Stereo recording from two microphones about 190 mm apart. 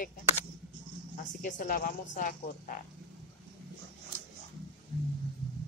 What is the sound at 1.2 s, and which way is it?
Speech, 45° left (ahead or behind).